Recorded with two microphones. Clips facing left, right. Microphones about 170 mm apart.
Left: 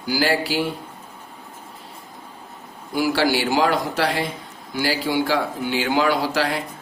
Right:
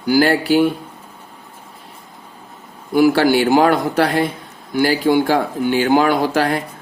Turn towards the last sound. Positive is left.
turn(degrees=-50)  # may be behind; listen again after turning